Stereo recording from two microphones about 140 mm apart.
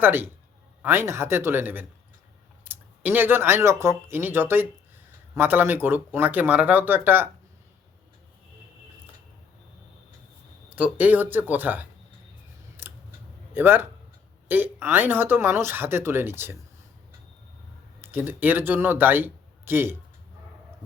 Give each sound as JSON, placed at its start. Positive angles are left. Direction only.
{"t": 0.0, "sound": "speech", "side_deg": -15}
{"t": 10.8, "sound": "speech", "side_deg": -10}
{"t": 12.8, "sound": "camera", "side_deg": -15}
{"t": 13.5, "sound": "a man's voice", "side_deg": -15}
{"t": 18.0, "sound": "speech", "side_deg": -15}